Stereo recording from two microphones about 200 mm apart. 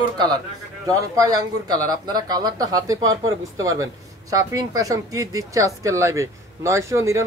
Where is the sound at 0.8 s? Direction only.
20° right (ahead or behind).